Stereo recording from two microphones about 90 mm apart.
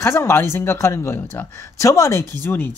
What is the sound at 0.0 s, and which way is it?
Speech, 30° left (ahead or behind).